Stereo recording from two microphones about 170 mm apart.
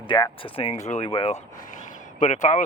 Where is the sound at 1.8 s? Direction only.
45° left (ahead or behind).